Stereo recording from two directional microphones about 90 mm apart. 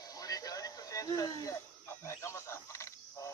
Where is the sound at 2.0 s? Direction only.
30° left (ahead or behind).